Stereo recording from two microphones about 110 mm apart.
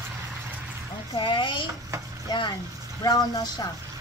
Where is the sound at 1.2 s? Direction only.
50° left (ahead or behind).